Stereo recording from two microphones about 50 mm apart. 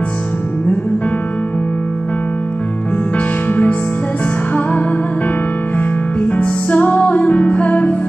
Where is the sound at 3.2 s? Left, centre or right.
Left.